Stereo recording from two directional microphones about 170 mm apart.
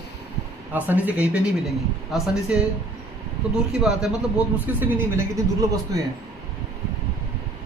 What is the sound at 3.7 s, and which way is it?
Speech, 5° right (ahead or behind).